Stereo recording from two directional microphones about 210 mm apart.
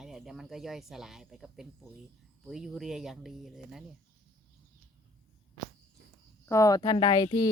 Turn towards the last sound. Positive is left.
turn(degrees=20)  # may be behind; listen again after turning